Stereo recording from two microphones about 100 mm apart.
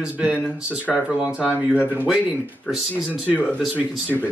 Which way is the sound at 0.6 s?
15° right (ahead or behind).